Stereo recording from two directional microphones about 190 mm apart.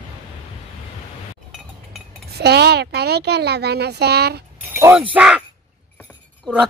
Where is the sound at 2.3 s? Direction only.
60° right (ahead or behind).